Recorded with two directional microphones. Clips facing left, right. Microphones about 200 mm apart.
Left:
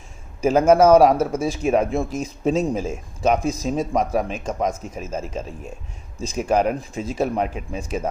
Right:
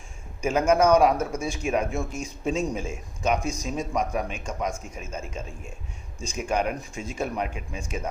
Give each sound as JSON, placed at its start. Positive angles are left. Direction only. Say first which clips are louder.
{"t": 0.4, "sound": "speech", "louder": "left 6 dB", "side_deg": 35}